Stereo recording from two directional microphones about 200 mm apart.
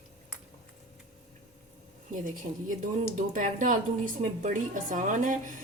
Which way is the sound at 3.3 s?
40° right (ahead or behind).